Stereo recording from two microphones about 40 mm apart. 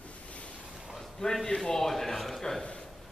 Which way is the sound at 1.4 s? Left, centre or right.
Centre.